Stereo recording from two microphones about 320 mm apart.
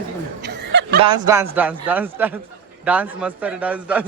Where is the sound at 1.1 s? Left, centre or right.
Centre.